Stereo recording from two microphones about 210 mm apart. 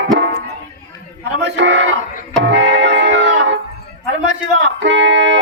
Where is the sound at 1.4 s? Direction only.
60° right (ahead or behind).